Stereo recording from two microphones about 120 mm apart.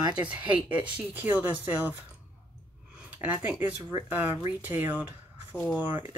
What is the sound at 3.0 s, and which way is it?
Speech, 15° right (ahead or behind).